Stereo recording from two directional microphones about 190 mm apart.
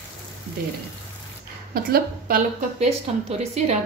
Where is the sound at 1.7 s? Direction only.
50° right (ahead or behind).